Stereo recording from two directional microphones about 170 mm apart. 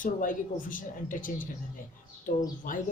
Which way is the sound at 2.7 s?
55° left (ahead or behind).